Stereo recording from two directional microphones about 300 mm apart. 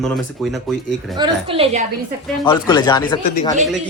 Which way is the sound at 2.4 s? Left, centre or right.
Centre.